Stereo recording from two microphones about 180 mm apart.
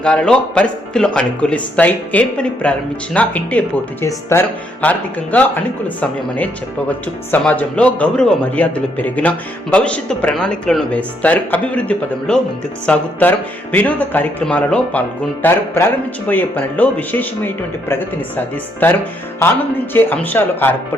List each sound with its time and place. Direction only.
0.0 s speech: 5° left (ahead or behind)